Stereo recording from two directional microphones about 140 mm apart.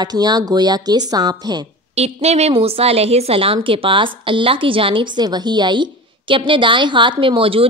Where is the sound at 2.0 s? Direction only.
50° right (ahead or behind).